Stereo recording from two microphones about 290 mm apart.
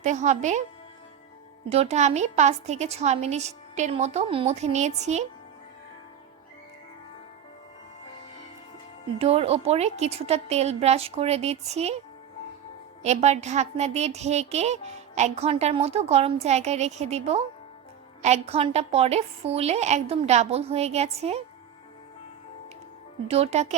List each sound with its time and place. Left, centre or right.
0.0 s a woman's voice: right
1.7 s a woman's voice: right
9.1 s a woman's voice: centre
13.0 s a woman's voice: right
23.3 s a woman's voice: right